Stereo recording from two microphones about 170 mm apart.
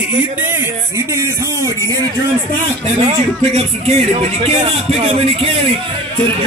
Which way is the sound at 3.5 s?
35° right (ahead or behind).